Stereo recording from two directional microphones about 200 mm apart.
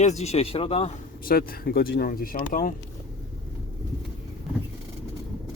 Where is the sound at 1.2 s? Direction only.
45° left (ahead or behind).